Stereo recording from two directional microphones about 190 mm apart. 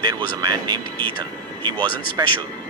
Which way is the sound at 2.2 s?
20° right (ahead or behind).